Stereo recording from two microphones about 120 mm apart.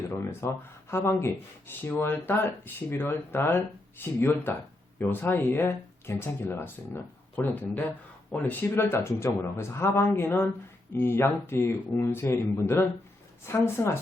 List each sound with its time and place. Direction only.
0.3 s speech: 20° left (ahead or behind)